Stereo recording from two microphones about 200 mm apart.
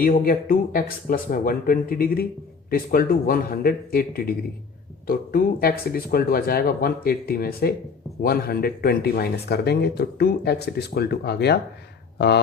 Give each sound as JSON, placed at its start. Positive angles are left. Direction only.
{"t": 0.0, "sound": "speech", "side_deg": 45}